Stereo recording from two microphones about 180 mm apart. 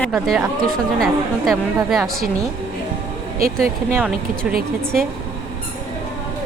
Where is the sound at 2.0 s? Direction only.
55° right (ahead or behind).